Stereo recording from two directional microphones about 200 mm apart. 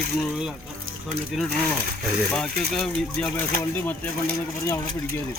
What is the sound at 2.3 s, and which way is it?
Speech, centre (ahead or behind).